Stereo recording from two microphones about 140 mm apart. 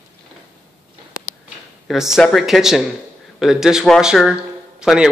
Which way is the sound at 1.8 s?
5° right (ahead or behind).